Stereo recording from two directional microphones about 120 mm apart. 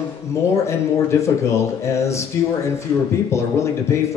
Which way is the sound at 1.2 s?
25° left (ahead or behind).